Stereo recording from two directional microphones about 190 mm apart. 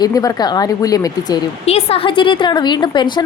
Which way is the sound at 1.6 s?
30° left (ahead or behind).